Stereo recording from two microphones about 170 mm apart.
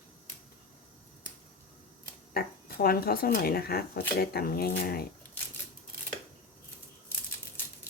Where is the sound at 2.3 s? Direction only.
60° left (ahead or behind).